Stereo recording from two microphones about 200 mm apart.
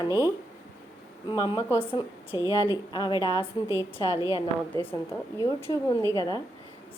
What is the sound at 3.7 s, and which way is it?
Speech, 15° right (ahead or behind).